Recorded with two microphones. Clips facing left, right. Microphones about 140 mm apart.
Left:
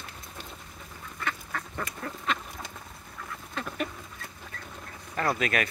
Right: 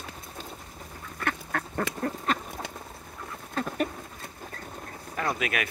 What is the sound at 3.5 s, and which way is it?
Duck, 40° right (ahead or behind).